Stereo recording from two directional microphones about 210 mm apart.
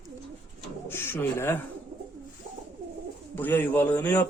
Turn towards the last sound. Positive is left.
turn(degrees=10)  # may be behind; listen again after turning